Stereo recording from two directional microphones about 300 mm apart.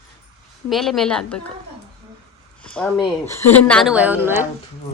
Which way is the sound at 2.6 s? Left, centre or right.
Centre.